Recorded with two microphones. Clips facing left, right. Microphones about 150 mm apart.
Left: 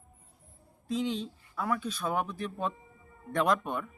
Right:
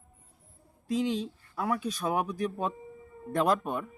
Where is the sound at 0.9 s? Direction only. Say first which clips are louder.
Right 3 dB; 10° right (ahead or behind).